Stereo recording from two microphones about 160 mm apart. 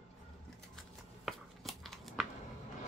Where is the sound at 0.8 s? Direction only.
Centre (ahead or behind).